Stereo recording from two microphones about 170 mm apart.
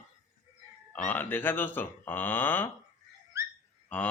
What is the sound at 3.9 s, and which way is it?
Speech, 10° left (ahead or behind).